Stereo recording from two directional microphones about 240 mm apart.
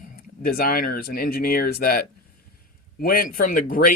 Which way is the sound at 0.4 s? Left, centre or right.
Left.